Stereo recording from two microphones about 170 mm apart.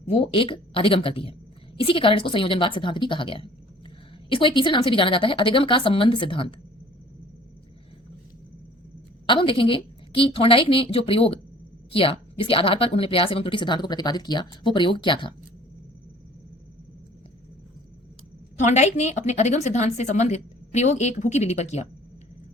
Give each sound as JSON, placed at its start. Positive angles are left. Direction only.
{"t": 0.0, "sound": "a woman's voice", "side_deg": 35}
{"t": 9.2, "sound": "a woman's voice", "side_deg": 30}
{"t": 18.6, "sound": "a woman's voice", "side_deg": 40}